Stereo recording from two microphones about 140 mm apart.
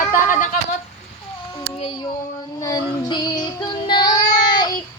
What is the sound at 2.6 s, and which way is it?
Child singing, 30° left (ahead or behind).